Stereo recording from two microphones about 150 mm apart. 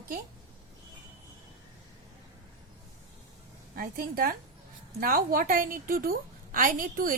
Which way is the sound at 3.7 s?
80° right.